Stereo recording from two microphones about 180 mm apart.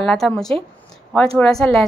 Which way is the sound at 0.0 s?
5° left (ahead or behind).